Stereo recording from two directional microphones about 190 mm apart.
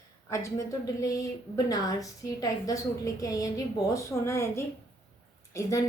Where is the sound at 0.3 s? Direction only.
15° left (ahead or behind).